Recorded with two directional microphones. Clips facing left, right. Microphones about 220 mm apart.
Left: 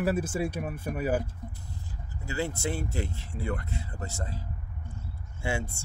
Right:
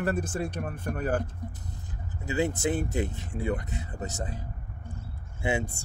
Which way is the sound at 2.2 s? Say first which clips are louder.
Right 4 dB; 20° right (ahead or behind).